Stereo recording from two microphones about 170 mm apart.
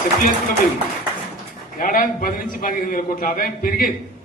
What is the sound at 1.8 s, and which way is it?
A man's voice, 55° left (ahead or behind).